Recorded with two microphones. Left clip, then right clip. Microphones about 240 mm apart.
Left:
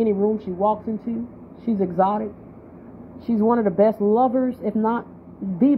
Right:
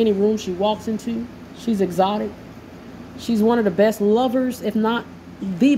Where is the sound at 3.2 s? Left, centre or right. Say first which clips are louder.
Right 1 dB; centre.